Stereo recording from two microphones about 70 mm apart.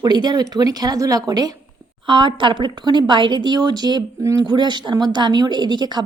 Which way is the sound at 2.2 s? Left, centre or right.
Right.